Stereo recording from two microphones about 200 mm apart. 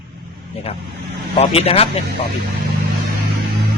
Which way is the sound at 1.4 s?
30° left (ahead or behind).